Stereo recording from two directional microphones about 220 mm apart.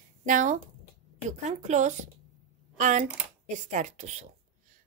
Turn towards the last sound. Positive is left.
turn(degrees=-30)  # may be behind; listen again after turning